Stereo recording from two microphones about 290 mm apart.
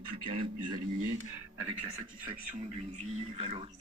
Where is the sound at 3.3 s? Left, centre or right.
Centre.